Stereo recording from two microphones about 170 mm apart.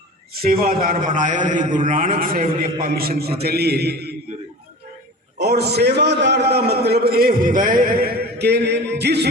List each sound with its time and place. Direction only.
0.3 s a man's voice: 60° right (ahead or behind)
5.4 s a man's voice: 75° right (ahead or behind)